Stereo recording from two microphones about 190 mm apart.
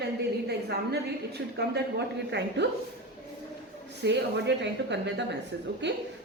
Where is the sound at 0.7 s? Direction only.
60° right (ahead or behind).